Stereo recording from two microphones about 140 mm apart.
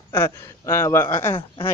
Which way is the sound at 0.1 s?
15° left (ahead or behind).